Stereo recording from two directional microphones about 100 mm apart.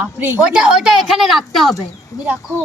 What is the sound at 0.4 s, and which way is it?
A woman's voice, 10° right (ahead or behind).